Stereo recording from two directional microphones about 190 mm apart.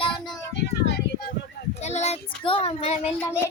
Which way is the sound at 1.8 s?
35° left (ahead or behind).